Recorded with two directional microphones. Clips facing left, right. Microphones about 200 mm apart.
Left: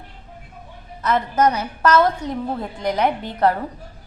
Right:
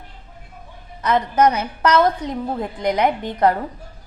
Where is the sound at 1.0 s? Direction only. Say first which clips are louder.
Right 2 dB; 20° right (ahead or behind).